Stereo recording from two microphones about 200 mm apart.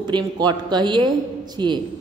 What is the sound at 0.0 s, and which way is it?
A woman's voice, 20° right (ahead or behind).